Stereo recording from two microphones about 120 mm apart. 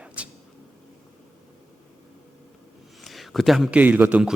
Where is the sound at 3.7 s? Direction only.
15° right (ahead or behind).